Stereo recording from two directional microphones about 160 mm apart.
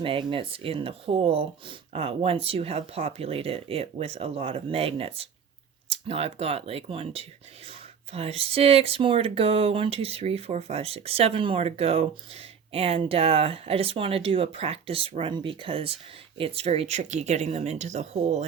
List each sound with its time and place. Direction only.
0.0 s speech: 35° right (ahead or behind)